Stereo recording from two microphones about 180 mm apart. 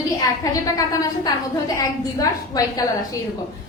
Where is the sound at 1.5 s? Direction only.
20° left (ahead or behind).